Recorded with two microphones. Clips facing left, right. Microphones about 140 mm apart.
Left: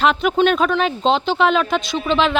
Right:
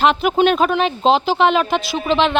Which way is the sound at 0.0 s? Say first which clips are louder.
Right 1 dB; centre (ahead or behind).